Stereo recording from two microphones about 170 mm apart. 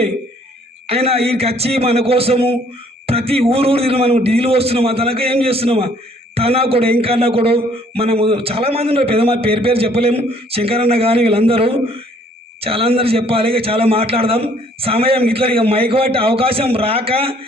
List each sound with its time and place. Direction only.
0.9 s a man's voice: 35° right (ahead or behind)